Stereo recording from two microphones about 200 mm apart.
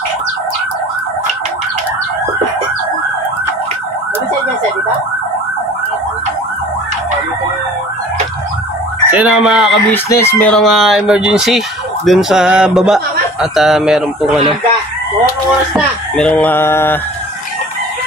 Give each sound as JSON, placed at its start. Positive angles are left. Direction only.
{"t": 9.1, "sound": "speech", "side_deg": -5}
{"t": 9.8, "sound": "speech", "side_deg": 10}
{"t": 15.7, "sound": "a sound", "side_deg": 5}